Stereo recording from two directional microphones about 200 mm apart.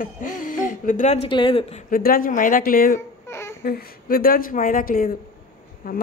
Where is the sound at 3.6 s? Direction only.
45° left (ahead or behind).